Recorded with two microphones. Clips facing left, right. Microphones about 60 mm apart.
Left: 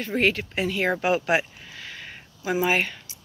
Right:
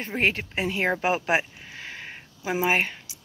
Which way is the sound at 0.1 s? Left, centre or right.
Right.